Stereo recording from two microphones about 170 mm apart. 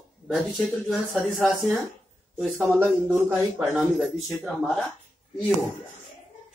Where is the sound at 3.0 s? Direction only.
10° right (ahead or behind).